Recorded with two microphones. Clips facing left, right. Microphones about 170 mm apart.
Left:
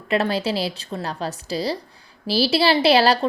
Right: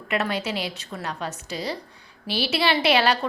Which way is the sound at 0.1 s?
30° left (ahead or behind).